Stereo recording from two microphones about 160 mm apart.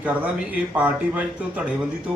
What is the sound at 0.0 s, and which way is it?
A man's voice, 10° right (ahead or behind).